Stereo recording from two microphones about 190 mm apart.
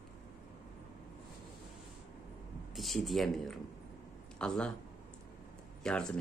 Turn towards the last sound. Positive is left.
turn(degrees=5)  # may be behind; listen again after turning